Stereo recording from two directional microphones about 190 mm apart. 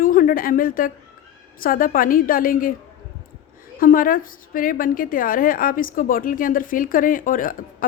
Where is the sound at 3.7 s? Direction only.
45° left (ahead or behind).